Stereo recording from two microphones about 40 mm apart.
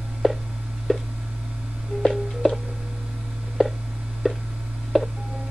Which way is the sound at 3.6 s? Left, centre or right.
Centre.